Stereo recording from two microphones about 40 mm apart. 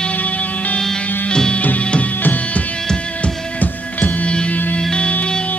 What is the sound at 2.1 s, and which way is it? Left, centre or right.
Music, left.